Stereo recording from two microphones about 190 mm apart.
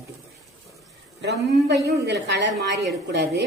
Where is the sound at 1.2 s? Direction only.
65° right (ahead or behind).